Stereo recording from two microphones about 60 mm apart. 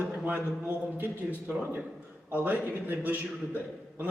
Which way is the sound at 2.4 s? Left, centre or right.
Right.